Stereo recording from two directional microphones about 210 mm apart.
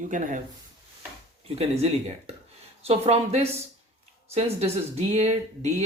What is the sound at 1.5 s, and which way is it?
Speech, 30° right (ahead or behind).